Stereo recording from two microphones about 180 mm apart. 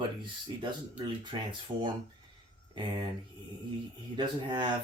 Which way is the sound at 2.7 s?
25° right (ahead or behind).